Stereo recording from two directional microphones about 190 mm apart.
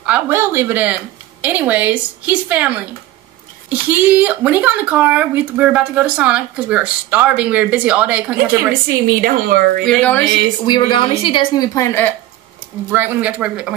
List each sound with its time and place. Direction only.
0.0 s speech: 10° right (ahead or behind)
9.2 s speech: 50° right (ahead or behind)
9.8 s speech: 10° left (ahead or behind)
10.6 s a woman's voice: 25° left (ahead or behind)
12.9 s speech: 10° right (ahead or behind)